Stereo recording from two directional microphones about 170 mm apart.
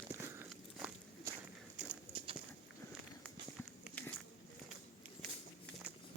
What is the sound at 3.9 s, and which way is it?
Biting, 5° left (ahead or behind).